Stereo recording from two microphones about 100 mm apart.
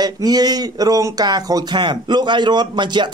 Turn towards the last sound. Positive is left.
turn(degrees=-50)  # may be behind; listen again after turning